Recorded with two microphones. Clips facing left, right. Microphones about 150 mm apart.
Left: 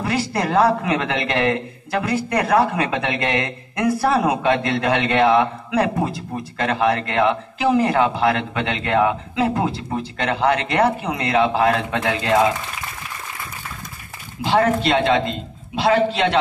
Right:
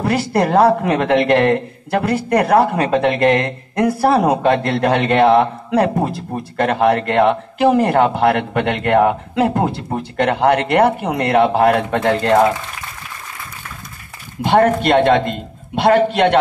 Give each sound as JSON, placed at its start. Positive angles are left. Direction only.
{"t": 0.0, "sound": "a man's voice", "side_deg": -60}
{"t": 0.8, "sound": "a man's voice", "side_deg": -50}
{"t": 2.3, "sound": "a man's voice", "side_deg": -30}
{"t": 3.8, "sound": "a man's voice", "side_deg": -30}
{"t": 6.5, "sound": "a man's voice", "side_deg": -50}
{"t": 14.4, "sound": "a man's voice", "side_deg": -55}